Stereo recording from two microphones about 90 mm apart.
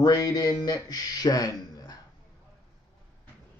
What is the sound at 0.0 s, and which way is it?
Speech, 45° left (ahead or behind).